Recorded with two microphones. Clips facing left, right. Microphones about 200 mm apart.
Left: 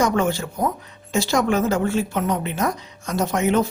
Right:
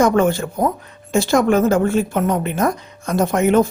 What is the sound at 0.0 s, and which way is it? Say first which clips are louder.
A woman's voice: right 5 dB; 50° right (ahead or behind).